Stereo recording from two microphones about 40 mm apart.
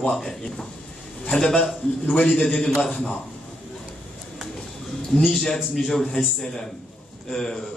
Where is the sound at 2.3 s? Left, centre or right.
Left.